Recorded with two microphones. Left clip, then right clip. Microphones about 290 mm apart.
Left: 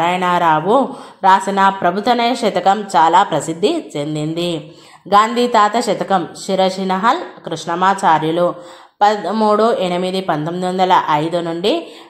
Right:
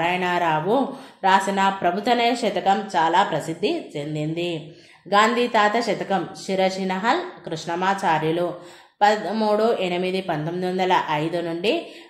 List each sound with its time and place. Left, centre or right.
0.0 s a woman's voice: centre